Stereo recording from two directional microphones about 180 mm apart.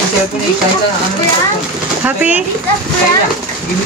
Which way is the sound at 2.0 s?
10° right (ahead or behind).